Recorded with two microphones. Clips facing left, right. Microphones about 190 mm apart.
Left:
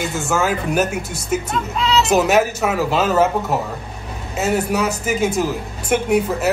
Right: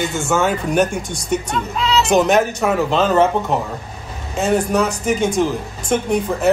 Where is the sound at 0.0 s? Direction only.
Centre (ahead or behind).